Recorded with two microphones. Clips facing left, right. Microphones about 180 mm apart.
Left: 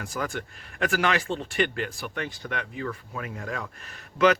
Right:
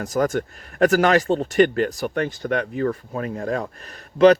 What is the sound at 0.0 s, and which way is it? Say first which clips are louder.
Speech: right 10 dB; 40° right (ahead or behind).